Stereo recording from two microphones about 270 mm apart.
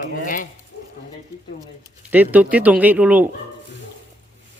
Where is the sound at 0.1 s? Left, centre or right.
Left.